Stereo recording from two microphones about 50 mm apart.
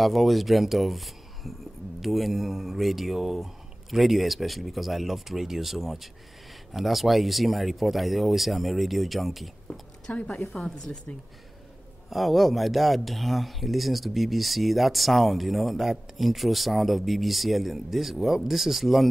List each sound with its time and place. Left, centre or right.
0.0 s speech: centre
10.1 s a woman's voice: left
10.5 s speech: centre
12.1 s speech: centre